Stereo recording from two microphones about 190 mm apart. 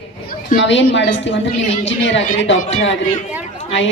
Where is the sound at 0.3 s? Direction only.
70° left (ahead or behind).